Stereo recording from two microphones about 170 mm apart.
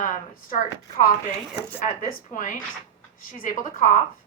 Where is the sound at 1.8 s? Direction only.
55° left (ahead or behind).